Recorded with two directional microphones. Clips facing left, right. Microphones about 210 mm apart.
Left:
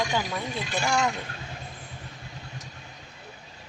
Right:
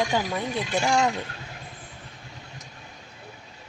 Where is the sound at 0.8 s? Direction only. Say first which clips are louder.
Right 3 dB; 30° right (ahead or behind).